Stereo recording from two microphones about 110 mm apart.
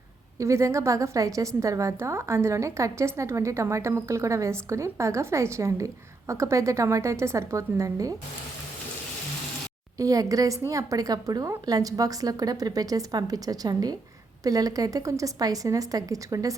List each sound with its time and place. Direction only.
0.3 s a woman's voice: 25° right (ahead or behind)
10.0 s a woman's voice: 30° right (ahead or behind)